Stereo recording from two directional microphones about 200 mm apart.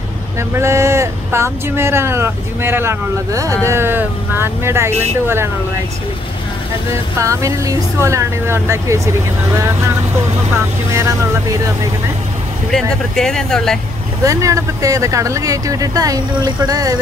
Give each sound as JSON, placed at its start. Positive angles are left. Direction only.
{"t": 0.4, "sound": "speech", "side_deg": -15}
{"t": 6.9, "sound": "speech", "side_deg": -15}
{"t": 10.9, "sound": "speech", "side_deg": -15}
{"t": 12.7, "sound": "speech", "side_deg": 5}
{"t": 14.2, "sound": "speech", "side_deg": -15}